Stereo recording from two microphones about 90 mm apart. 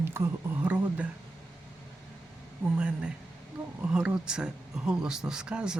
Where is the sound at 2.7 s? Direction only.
10° right (ahead or behind).